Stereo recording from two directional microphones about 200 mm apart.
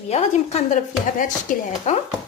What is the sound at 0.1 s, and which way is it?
Speech, 35° left (ahead or behind).